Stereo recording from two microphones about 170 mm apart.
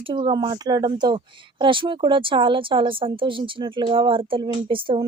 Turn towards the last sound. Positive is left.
turn(degrees=-30)  # may be behind; listen again after turning